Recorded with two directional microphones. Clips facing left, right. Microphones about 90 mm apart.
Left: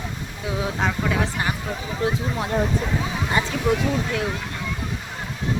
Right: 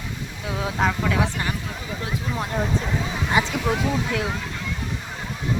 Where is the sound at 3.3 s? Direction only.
5° right (ahead or behind).